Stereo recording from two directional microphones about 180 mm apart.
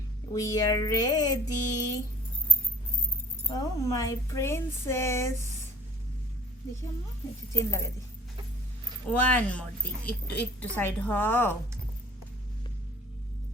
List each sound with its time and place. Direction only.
0.3 s a sound: 20° left (ahead or behind)
3.5 s a woman's voice: 20° left (ahead or behind)
7.5 s a woman's voice: 15° left (ahead or behind)
9.0 s a woman's voice: 10° left (ahead or behind)